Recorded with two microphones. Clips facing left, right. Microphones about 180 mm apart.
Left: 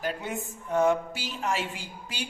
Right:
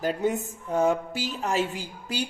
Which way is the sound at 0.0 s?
40° right (ahead or behind).